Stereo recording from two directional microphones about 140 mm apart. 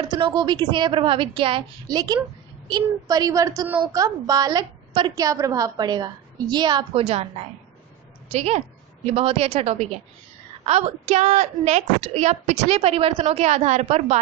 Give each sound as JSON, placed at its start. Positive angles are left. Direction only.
{"t": 0.1, "sound": "a woman's voice", "side_deg": -30}